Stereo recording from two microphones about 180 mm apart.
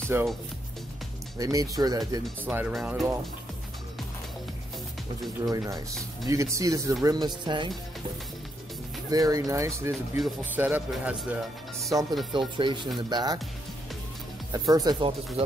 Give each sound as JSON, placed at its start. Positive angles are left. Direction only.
{"t": 0.1, "sound": "speech", "side_deg": -10}
{"t": 1.4, "sound": "speech", "side_deg": -20}
{"t": 2.4, "sound": "speech", "side_deg": -10}
{"t": 6.2, "sound": "speech", "side_deg": -15}
{"t": 9.1, "sound": "speech", "side_deg": -20}
{"t": 10.1, "sound": "speech", "side_deg": -5}
{"t": 11.9, "sound": "speech", "side_deg": -20}
{"t": 14.5, "sound": "speech", "side_deg": -20}